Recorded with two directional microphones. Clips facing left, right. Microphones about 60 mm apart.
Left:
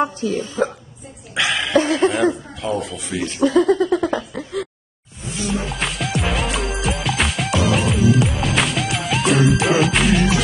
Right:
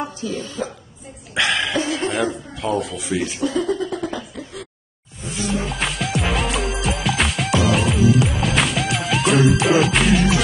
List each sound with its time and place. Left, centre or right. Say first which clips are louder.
0.2 s speech: left 5 dB; left
1.3 s a man's voice: left 1 dB; centre
1.8 s speech: left 5 dB; left
2.3 s a man's voice: right 1 dB; centre
3.4 s a sound: left 9 dB; left
5.7 s music: even; centre